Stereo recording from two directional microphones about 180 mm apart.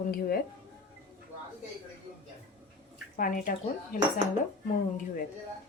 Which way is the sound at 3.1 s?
50° left (ahead or behind).